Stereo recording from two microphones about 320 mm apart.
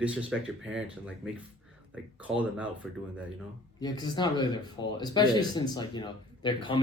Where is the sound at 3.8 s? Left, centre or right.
Centre.